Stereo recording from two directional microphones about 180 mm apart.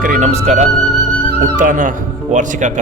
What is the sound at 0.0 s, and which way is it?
Speech, 45° right (ahead or behind).